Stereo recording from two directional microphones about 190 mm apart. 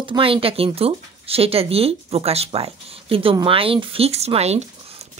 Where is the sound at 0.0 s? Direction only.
25° right (ahead or behind).